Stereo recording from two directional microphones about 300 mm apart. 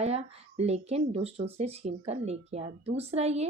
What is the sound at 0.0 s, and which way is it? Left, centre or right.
Speech, right.